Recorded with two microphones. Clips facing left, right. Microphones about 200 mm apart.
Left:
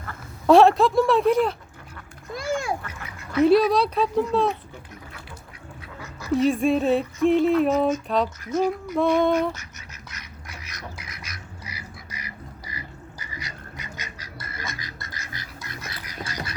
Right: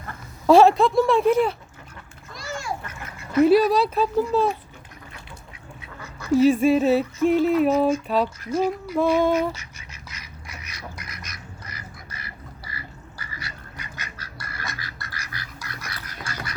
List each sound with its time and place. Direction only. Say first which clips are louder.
0.4 s speech: even; centre (ahead or behind)
2.3 s a sound: left 5 dB; 55° left (ahead or behind)
3.3 s speech: right 1 dB; 5° right (ahead or behind)
6.0 s duck: right 4 dB; centre (ahead or behind)
8.0 s speech: right 1 dB; 5° right (ahead or behind)
10.5 s duck: even; centre (ahead or behind)